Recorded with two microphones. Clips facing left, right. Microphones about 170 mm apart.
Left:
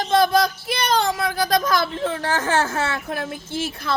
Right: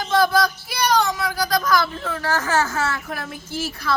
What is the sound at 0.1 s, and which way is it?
Child singing, 20° left (ahead or behind).